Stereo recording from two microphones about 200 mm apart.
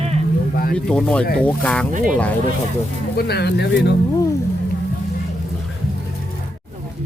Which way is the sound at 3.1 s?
55° left (ahead or behind).